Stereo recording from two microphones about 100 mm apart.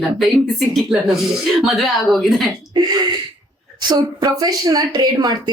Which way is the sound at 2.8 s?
45° right (ahead or behind).